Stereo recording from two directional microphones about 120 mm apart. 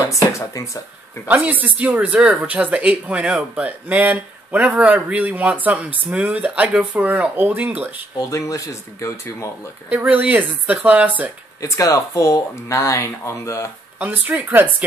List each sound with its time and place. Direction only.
0.1 s speech: 25° left (ahead or behind)
1.2 s speech: 15° right (ahead or behind)
8.2 s speech: 25° left (ahead or behind)
9.8 s speech: 15° right (ahead or behind)
11.6 s speech: 25° left (ahead or behind)
13.9 s speech: 15° right (ahead or behind)